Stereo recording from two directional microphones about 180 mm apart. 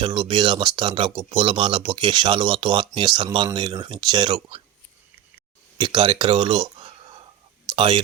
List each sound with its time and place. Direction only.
0.0 s speech: 25° right (ahead or behind)
5.7 s speech: 30° right (ahead or behind)